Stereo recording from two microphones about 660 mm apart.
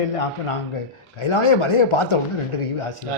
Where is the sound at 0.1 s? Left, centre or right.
Left.